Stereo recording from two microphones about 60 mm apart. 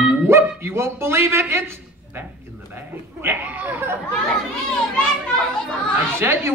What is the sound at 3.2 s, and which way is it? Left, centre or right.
Speech, right.